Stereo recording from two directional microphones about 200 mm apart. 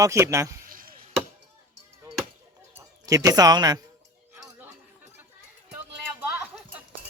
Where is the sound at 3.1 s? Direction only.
15° right (ahead or behind).